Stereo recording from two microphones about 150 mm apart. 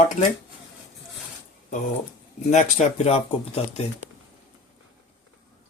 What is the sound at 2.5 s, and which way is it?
Speech, 50° left (ahead or behind).